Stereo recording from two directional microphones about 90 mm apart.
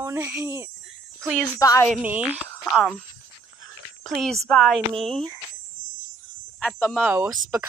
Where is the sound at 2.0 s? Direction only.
20° right (ahead or behind).